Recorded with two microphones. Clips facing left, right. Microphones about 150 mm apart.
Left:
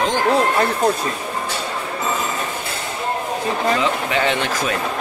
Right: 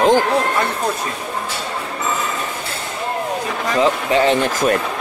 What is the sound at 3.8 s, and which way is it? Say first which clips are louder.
Speech: right 5 dB; 35° right (ahead or behind).